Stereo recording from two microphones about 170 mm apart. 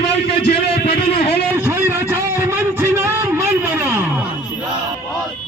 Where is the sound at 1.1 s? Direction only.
35° left (ahead or behind).